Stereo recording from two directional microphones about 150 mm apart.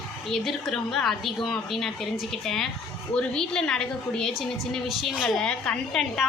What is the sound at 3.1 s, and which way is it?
A woman's voice, 5° left (ahead or behind).